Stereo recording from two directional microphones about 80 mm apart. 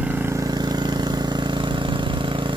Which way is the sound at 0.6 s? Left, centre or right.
Right.